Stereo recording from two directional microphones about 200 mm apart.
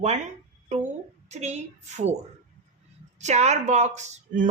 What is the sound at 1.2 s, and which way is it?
Speech, 35° right (ahead or behind).